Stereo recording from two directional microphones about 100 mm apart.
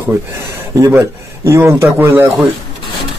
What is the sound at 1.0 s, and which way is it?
Speech, 25° right (ahead or behind).